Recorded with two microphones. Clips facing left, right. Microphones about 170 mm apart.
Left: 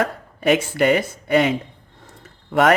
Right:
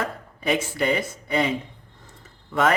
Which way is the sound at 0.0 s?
70° left (ahead or behind).